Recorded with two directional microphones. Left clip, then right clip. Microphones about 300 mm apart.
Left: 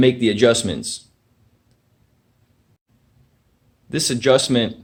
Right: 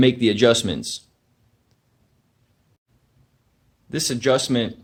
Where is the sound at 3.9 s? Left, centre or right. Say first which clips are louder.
Left 4 dB; centre.